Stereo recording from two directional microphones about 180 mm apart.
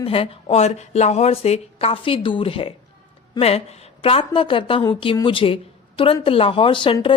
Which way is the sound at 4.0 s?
30° left (ahead or behind).